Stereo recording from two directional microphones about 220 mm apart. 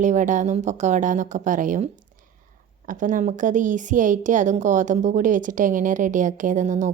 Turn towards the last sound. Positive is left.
turn(degrees=-35)  # may be behind; listen again after turning